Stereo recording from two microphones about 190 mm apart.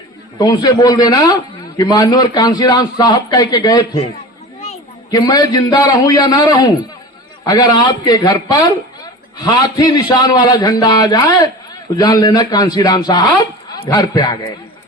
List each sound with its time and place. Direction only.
0.3 s a man's voice: 20° left (ahead or behind)